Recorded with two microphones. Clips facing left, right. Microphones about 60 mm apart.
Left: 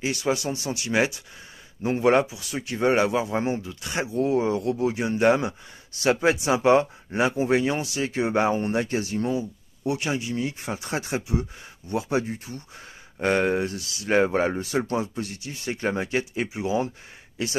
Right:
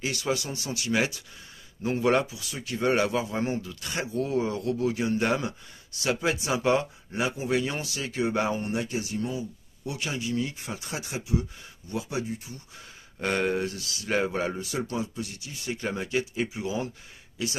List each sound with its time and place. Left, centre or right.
0.0 s speech: left
8.7 s speech: left
9.3 s speech: left
13.2 s speech: left